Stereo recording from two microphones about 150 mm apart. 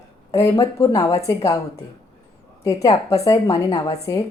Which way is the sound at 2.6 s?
20° left (ahead or behind).